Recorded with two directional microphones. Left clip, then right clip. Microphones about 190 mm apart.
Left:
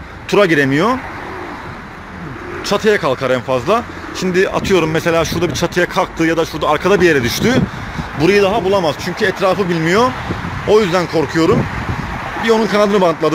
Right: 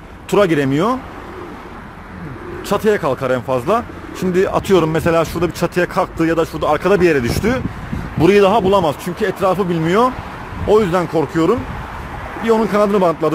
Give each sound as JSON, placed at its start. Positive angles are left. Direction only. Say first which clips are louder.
{"t": 0.3, "sound": "speech", "louder": "left 2 dB", "side_deg": -5}
{"t": 2.7, "sound": "speech", "louder": "left 2 dB", "side_deg": -5}
{"t": 8.2, "sound": "a man's voice", "louder": "right 1 dB", "side_deg": -25}
{"t": 8.8, "sound": "speech", "louder": "left 2 dB", "side_deg": -10}